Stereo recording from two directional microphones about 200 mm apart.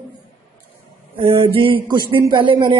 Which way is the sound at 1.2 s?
30° right (ahead or behind).